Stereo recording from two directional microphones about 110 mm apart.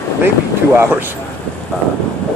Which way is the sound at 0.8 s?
20° right (ahead or behind).